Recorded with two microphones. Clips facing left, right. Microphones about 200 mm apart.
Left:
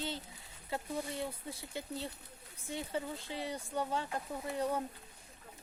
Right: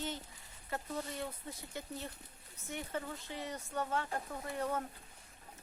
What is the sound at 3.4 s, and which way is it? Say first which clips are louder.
Speech: left 2 dB; 10° left (ahead or behind).